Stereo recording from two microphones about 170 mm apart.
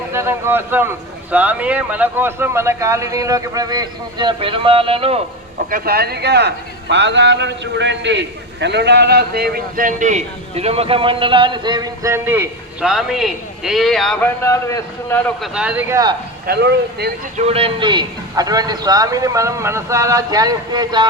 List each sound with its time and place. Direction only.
0.1 s speech: 15° right (ahead or behind); by 5.2 s 35° right (ahead or behind)
5.7 s speech: 65° right (ahead or behind); by 12.9 s 15° right (ahead or behind)
12.9 s a man's voice: centre (ahead or behind)
14.3 s a man's voice: 15° left (ahead or behind)
15.4 s a man's voice: 5° right (ahead or behind)
15.9 s speech: 20° right (ahead or behind)
16.5 s speech: 75° right (ahead or behind)
17.3 s speech: 35° right (ahead or behind)